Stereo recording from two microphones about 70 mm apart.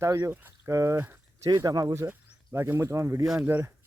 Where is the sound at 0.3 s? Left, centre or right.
Right.